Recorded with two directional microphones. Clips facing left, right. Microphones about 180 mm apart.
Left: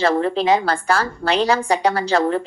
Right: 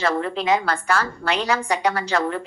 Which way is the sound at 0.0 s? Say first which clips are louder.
Left 5 dB; 30° left (ahead or behind).